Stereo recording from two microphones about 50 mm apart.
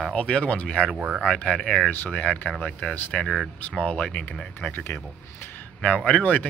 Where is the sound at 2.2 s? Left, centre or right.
Left.